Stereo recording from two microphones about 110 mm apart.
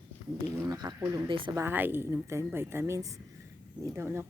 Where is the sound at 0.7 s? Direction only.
40° right (ahead or behind).